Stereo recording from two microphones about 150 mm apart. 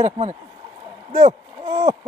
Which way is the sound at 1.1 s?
45° right (ahead or behind).